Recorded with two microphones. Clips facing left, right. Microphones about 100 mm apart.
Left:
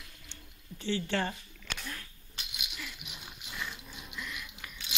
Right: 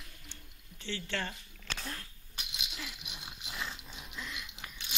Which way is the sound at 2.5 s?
25° right (ahead or behind).